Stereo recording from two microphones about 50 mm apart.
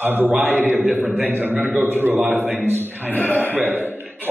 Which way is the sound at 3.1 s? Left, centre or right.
Left.